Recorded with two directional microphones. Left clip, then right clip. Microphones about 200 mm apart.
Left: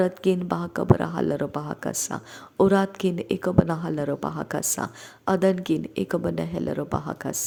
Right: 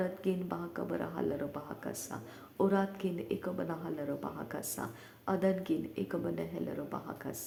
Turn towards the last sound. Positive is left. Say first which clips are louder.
# left 12 dB
turn(degrees=35)  # may be behind; listen again after turning